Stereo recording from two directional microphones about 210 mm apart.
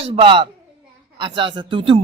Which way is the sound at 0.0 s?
25° right (ahead or behind).